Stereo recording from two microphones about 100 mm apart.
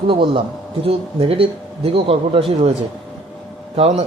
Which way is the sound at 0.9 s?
75° right (ahead or behind).